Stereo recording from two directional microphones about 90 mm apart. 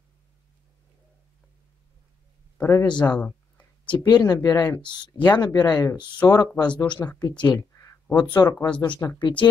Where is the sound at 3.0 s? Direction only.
15° left (ahead or behind).